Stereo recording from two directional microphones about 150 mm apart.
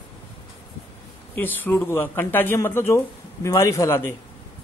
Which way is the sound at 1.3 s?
10° left (ahead or behind).